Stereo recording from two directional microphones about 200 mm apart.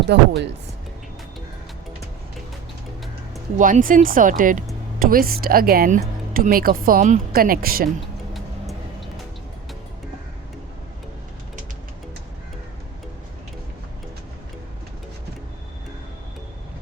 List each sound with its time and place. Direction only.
0.0 s speech: 60° right (ahead or behind)
3.6 s speech: 40° right (ahead or behind)
7.9 s vehicle: centre (ahead or behind)